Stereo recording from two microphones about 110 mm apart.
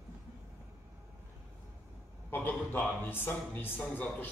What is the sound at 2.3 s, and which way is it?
A man's voice, 15° left (ahead or behind).